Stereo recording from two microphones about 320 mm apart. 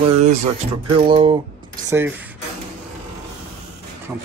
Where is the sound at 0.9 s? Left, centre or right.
Centre.